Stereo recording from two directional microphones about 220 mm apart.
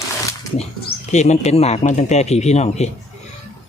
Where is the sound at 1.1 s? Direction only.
30° left (ahead or behind).